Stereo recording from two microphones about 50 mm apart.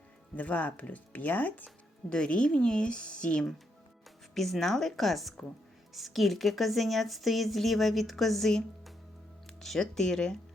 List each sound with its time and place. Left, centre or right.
0.3 s speech: left
1.6 s speech: centre
4.4 s a woman's voice: centre